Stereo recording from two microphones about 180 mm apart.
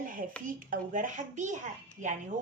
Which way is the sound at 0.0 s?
50° right (ahead or behind).